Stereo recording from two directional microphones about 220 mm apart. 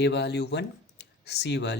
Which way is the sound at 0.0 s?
50° left (ahead or behind).